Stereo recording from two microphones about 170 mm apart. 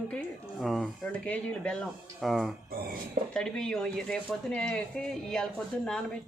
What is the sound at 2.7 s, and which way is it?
Speech, 60° right (ahead or behind).